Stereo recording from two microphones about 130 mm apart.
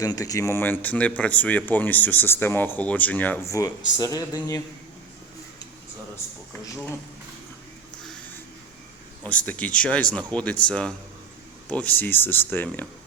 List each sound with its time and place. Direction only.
0.0 s speech: 25° left (ahead or behind); by 3.4 s 10° left (ahead or behind)
3.4 s speech: 25° left (ahead or behind)
9.2 s speech: 10° left (ahead or behind)